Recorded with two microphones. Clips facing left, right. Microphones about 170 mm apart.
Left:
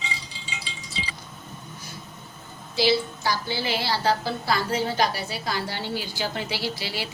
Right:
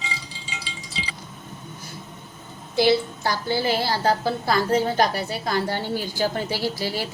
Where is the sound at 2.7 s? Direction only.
55° right (ahead or behind).